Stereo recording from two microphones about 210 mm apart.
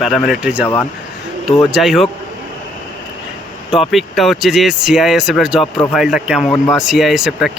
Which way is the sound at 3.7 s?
Centre (ahead or behind).